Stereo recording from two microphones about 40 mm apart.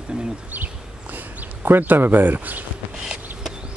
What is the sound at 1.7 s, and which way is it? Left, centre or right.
Speech, right.